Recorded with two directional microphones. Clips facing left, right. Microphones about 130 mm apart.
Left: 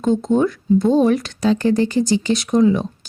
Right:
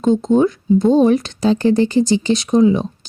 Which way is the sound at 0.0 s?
20° right (ahead or behind).